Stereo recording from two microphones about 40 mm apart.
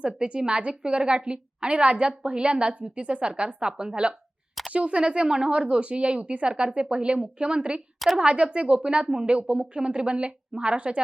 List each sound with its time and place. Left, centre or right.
0.0 s a woman's voice: right